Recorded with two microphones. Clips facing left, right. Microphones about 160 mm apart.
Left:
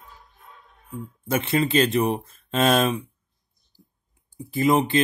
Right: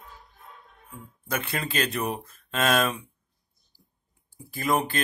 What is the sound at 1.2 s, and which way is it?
Speech, 25° left (ahead or behind).